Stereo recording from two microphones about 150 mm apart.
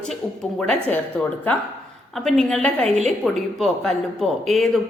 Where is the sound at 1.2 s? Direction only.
5° left (ahead or behind).